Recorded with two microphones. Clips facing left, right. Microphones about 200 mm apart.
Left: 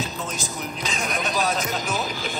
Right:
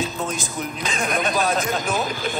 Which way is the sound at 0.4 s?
55° right (ahead or behind).